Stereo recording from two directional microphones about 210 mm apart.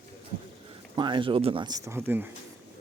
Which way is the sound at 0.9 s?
20° right (ahead or behind).